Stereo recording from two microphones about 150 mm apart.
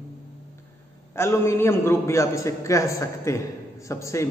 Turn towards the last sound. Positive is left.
turn(degrees=20)  # may be behind; listen again after turning